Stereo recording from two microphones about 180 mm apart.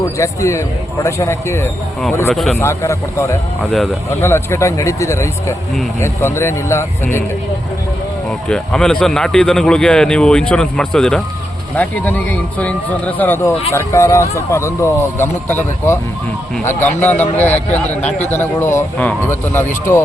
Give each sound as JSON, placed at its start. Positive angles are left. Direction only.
{"t": 0.0, "sound": "a man's voice", "side_deg": 15}
{"t": 2.3, "sound": "a man's voice", "side_deg": 0}
{"t": 2.6, "sound": "a man's voice", "side_deg": 15}
{"t": 3.6, "sound": "a man's voice", "side_deg": 0}
{"t": 4.1, "sound": "a man's voice", "side_deg": 15}
{"t": 8.3, "sound": "a man's voice", "side_deg": 5}